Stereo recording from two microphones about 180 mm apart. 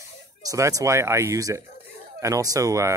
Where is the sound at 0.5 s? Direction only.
20° right (ahead or behind).